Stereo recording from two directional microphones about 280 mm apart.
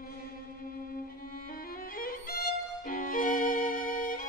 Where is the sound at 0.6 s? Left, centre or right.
Left.